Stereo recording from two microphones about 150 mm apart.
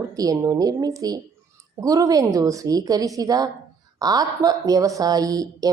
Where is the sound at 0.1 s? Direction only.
25° right (ahead or behind).